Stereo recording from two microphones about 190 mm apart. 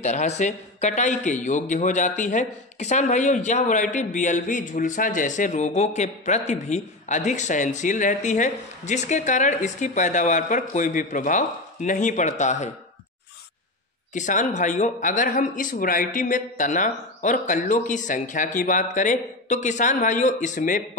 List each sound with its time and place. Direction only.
0.0 s a man's voice: 40° left (ahead or behind)
14.1 s a man's voice: 40° left (ahead or behind)